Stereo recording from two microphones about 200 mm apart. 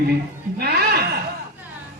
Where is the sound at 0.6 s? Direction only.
50° right (ahead or behind).